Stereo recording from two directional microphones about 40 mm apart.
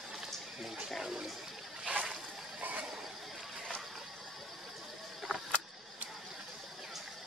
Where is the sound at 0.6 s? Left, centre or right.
Centre.